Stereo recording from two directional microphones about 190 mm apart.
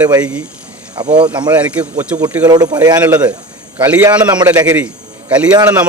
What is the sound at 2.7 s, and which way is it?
Speech, 20° right (ahead or behind).